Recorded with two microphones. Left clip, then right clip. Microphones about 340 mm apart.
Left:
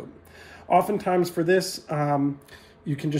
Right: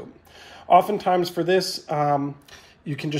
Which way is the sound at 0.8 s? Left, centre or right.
Centre.